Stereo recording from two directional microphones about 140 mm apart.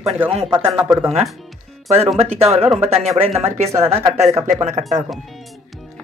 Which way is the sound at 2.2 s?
45° right (ahead or behind).